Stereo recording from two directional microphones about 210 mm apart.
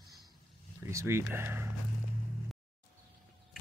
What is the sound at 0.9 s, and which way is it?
Speech, 15° right (ahead or behind).